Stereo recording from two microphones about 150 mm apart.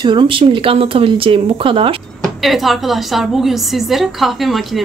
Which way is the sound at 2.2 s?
Centre (ahead or behind).